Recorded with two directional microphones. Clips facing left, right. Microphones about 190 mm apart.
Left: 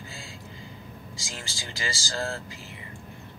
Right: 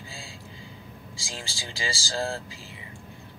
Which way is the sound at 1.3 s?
30° right (ahead or behind).